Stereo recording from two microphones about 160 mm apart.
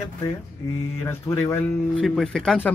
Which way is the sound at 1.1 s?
15° left (ahead or behind).